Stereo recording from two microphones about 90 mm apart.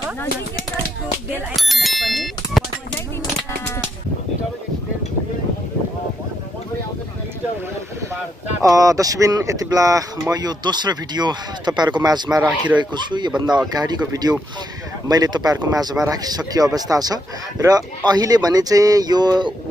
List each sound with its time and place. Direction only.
1.5 s bicycle bell: centre (ahead or behind)
8.6 s speech: 40° right (ahead or behind)
10.3 s speech: 50° right (ahead or behind)